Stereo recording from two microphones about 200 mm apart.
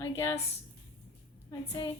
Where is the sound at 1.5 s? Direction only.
15° left (ahead or behind).